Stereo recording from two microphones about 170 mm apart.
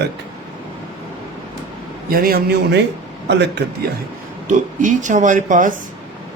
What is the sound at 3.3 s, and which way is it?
Speech, 90° right.